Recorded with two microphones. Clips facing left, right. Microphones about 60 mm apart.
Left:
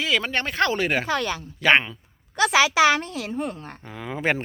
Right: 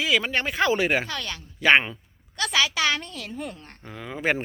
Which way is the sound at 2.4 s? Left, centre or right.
Left.